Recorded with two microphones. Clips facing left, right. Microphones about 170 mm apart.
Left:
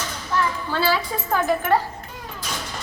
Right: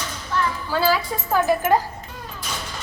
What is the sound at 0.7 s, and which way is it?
A woman's voice, 10° right (ahead or behind).